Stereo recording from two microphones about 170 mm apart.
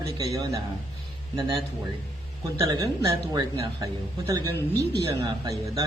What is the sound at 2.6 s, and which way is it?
A man's voice, 20° right (ahead or behind).